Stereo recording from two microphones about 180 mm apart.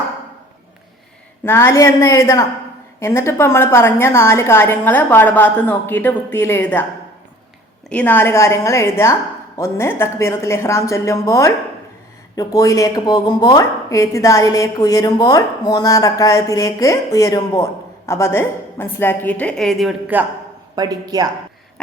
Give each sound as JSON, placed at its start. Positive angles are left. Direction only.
{"t": 1.5, "sound": "a woman's voice", "side_deg": 15}
{"t": 7.9, "sound": "a woman's voice", "side_deg": 10}
{"t": 20.1, "sound": "a man's voice", "side_deg": -10}
{"t": 20.7, "sound": "speech", "side_deg": -20}